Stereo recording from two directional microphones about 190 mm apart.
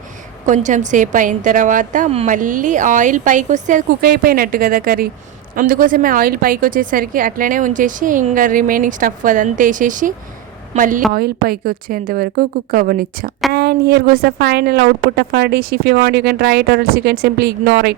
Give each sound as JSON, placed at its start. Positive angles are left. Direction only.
{"t": 0.4, "sound": "a woman's voice", "side_deg": -40}